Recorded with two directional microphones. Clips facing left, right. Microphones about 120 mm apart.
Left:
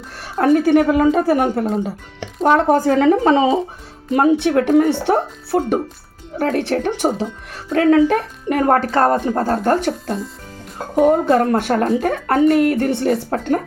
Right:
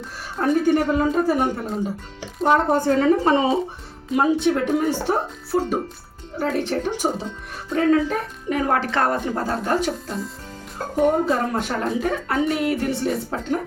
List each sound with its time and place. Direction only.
0.3 s a woman's voice: 80° left
2.2 s speech: 90° left
4.1 s speech: 65° left (ahead or behind)
7.7 s speech: 80° left; by 10.2 s 55° left (ahead or behind)
10.9 s speech: 65° left (ahead or behind)